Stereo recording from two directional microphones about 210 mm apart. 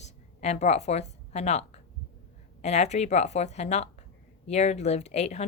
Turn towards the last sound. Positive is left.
turn(degrees=30)  # may be behind; listen again after turning